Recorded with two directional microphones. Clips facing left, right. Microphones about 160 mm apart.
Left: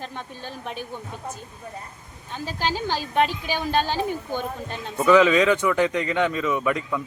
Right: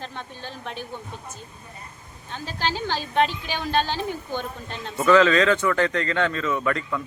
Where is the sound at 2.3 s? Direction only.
10° left (ahead or behind).